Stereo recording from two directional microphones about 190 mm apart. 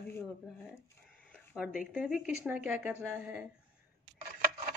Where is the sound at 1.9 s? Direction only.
5° right (ahead or behind).